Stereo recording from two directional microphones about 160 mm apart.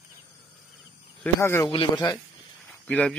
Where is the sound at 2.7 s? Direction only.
5° left (ahead or behind).